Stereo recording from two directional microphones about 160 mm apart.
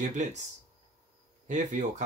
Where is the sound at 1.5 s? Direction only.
50° right (ahead or behind).